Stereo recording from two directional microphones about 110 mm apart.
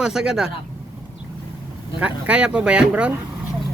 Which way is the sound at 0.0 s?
5° right (ahead or behind).